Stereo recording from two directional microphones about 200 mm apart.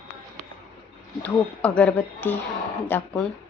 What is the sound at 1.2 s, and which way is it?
A woman's voice, 5° left (ahead or behind).